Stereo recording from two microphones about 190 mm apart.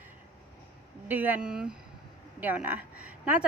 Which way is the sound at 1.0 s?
10° right (ahead or behind).